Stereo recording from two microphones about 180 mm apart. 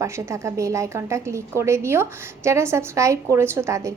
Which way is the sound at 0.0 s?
15° right (ahead or behind).